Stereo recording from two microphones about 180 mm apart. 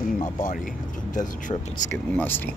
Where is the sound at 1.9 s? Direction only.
10° left (ahead or behind).